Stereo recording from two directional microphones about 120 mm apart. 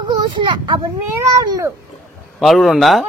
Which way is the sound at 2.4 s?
Centre (ahead or behind).